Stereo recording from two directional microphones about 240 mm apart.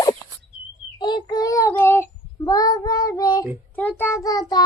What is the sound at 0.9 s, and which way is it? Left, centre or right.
Child singing, centre.